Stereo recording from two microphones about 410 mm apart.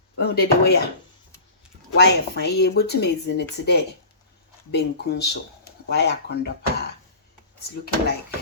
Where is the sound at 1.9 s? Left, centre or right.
Left.